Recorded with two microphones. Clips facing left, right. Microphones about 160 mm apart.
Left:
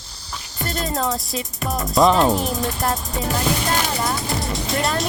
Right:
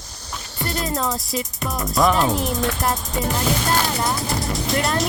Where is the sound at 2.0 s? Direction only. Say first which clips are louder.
Left 3 dB; 20° left (ahead or behind).